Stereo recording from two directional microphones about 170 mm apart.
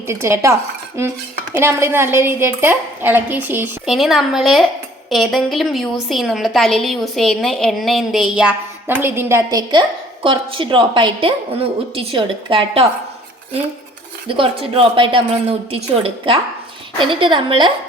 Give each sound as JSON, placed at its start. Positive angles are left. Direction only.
{"t": 0.1, "sound": "a woman's voice", "side_deg": -15}
{"t": 3.9, "sound": "a woman's voice", "side_deg": 0}
{"t": 14.3, "sound": "a woman's voice", "side_deg": -30}